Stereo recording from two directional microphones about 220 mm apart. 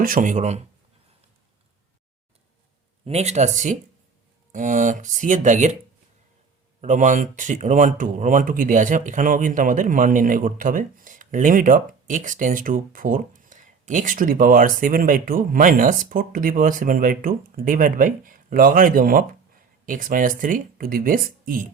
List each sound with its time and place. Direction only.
0.0 s speech: 35° right (ahead or behind)
3.0 s speech: 30° right (ahead or behind)
6.8 s speech: 35° right (ahead or behind)